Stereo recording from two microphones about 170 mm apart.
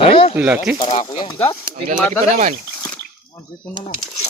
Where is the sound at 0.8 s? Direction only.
45° left (ahead or behind).